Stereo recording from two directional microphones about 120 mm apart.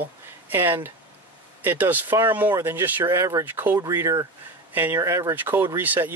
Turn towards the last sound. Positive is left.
turn(degrees=-15)  # may be behind; listen again after turning